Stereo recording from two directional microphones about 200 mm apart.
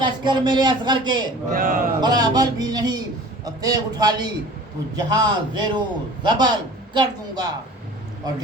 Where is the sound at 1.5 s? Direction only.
45° right (ahead or behind).